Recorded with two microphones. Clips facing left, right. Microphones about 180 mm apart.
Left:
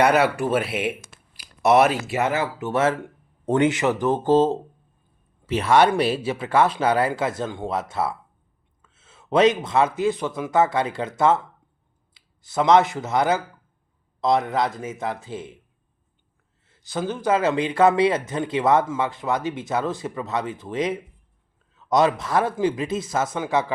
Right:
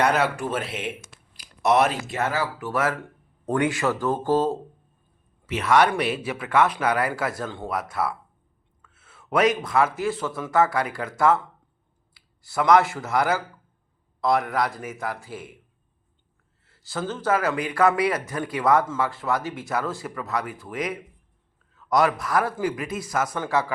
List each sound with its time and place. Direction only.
0.4 s speech: 10° left (ahead or behind)
2.3 s speech: 25° left (ahead or behind)
5.5 s a man's voice: 30° left (ahead or behind)
16.6 s a man's voice: 20° left (ahead or behind)